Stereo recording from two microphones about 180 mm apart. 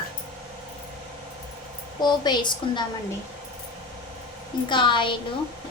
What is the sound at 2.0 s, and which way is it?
Speech, 25° left (ahead or behind).